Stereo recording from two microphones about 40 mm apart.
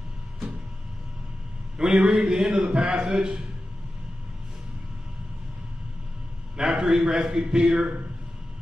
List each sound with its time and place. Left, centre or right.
1.8 s a man's voice: centre
6.5 s a man's voice: centre